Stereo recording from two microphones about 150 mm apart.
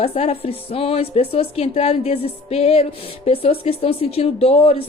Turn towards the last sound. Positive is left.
turn(degrees=40)  # may be behind; listen again after turning